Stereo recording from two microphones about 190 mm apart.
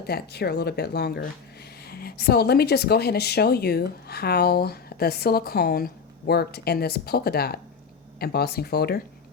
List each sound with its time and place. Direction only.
0.1 s speech: 55° left (ahead or behind)